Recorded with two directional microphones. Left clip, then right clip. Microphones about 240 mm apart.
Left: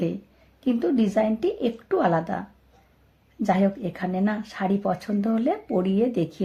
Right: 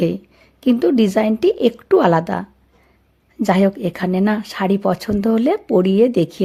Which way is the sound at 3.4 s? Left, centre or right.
Right.